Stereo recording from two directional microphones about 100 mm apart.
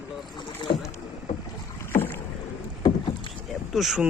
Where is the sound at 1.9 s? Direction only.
20° left (ahead or behind).